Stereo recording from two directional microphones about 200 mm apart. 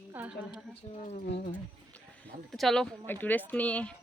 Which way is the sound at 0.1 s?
10° right (ahead or behind).